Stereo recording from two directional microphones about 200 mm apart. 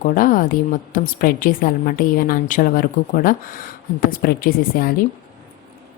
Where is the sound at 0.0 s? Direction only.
40° left (ahead or behind).